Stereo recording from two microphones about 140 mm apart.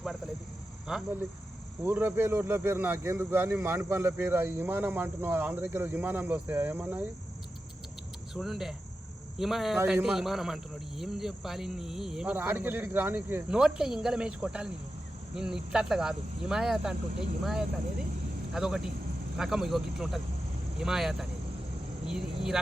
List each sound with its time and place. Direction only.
0.9 s speech: centre (ahead or behind)
1.8 s speech: 15° right (ahead or behind)
8.4 s speech: centre (ahead or behind)